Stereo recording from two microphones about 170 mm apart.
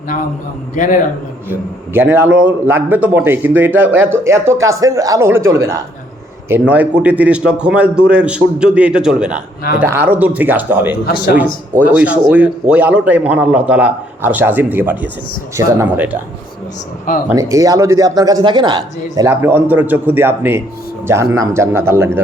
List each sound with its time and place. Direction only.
0.8 s a man's voice: 50° left (ahead or behind)
1.5 s a man's voice: 15° right (ahead or behind)
11.0 s a man's voice: 65° left (ahead or behind)
11.9 s a man's voice: 10° right (ahead or behind)
17.3 s speech: 20° right (ahead or behind)
19.1 s a man's voice: 15° right (ahead or behind)